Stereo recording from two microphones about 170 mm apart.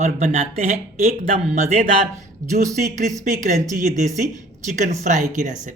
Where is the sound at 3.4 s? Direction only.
45° right (ahead or behind).